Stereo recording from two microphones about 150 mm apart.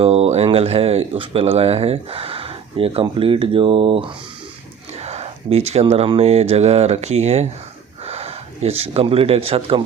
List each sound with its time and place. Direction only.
0.0 s speech: 45° right (ahead or behind)
4.9 s speech: 45° right (ahead or behind)